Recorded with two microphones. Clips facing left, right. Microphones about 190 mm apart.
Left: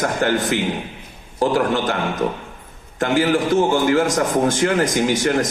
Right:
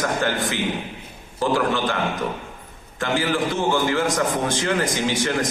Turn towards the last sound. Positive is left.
turn(degrees=45)  # may be behind; listen again after turning